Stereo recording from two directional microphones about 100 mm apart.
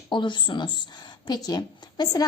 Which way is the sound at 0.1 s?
50° left (ahead or behind).